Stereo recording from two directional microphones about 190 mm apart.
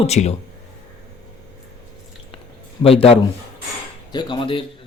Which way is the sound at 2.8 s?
30° left (ahead or behind).